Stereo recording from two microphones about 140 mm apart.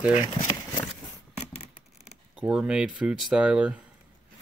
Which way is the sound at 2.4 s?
10° right (ahead or behind).